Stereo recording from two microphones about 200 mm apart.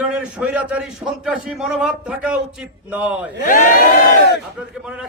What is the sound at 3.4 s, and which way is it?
Speech, 40° left (ahead or behind).